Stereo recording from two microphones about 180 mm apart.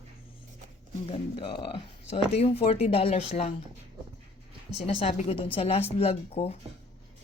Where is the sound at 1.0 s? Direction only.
30° left (ahead or behind).